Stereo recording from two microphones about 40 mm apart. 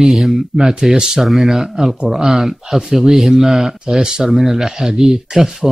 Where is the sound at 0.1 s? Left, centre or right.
Centre.